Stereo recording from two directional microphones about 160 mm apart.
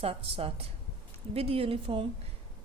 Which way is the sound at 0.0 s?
35° right (ahead or behind).